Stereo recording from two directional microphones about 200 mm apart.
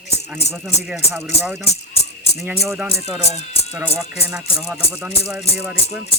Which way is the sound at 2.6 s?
15° right (ahead or behind).